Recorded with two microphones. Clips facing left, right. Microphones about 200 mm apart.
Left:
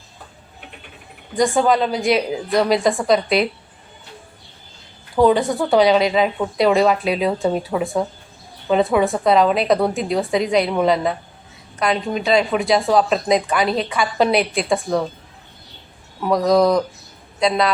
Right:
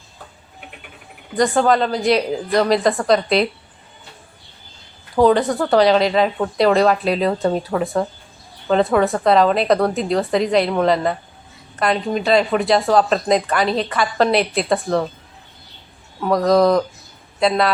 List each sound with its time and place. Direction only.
1.4 s speech: centre (ahead or behind)
5.1 s speech: centre (ahead or behind)
16.2 s speech: centre (ahead or behind)